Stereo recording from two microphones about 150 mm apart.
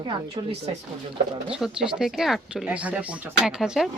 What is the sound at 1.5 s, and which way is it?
Speech, 5° right (ahead or behind).